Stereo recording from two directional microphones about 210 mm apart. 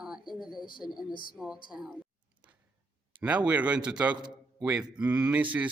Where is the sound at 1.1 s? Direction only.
45° left (ahead or behind).